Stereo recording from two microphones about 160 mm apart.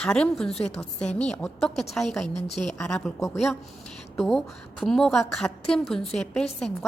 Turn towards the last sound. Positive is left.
turn(degrees=5)  # may be behind; listen again after turning